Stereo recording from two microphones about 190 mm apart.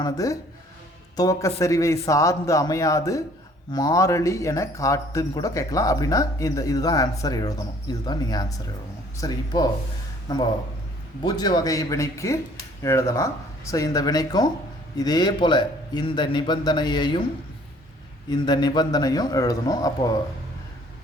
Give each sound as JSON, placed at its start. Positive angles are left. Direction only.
{"t": 0.0, "sound": "a man's voice", "side_deg": 20}
{"t": 18.3, "sound": "a man's voice", "side_deg": 20}